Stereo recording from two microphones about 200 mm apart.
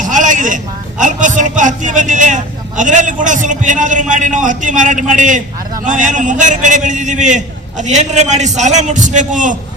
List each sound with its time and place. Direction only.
0.0 s a man's voice: 40° right (ahead or behind)